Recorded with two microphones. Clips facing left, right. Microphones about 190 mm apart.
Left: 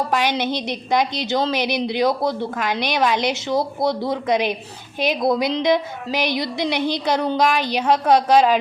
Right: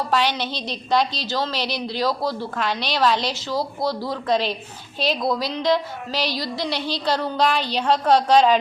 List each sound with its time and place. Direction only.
0.1 s a woman's voice: 15° left (ahead or behind)